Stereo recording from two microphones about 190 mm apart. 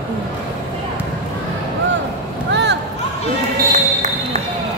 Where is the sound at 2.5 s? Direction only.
65° right (ahead or behind).